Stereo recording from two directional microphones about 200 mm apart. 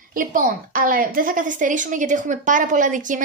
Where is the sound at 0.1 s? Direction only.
45° right (ahead or behind).